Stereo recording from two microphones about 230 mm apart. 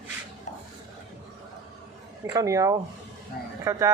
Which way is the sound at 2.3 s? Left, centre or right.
Centre.